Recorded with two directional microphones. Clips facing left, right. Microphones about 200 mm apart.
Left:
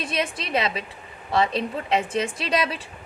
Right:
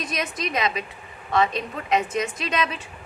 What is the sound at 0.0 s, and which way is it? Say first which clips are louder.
A woman's voice: left 1 dB; 30° left (ahead or behind).